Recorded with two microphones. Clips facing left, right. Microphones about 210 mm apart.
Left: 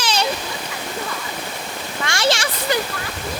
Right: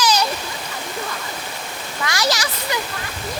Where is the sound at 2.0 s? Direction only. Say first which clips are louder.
Left 2 dB; 25° left (ahead or behind).